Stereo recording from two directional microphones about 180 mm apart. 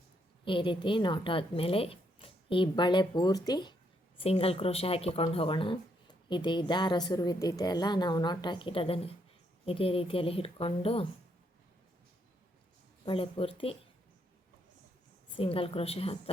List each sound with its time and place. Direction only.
0.4 s a woman's voice: 30° left (ahead or behind)
13.1 s a woman's voice: 30° left (ahead or behind)
15.4 s a woman's voice: 30° left (ahead or behind)